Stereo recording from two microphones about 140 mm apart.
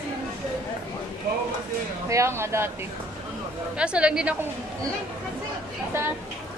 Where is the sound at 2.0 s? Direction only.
20° right (ahead or behind).